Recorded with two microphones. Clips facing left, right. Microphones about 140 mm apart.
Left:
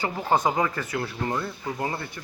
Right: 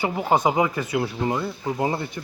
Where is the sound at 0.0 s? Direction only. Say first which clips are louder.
Right 3 dB; 15° right (ahead or behind).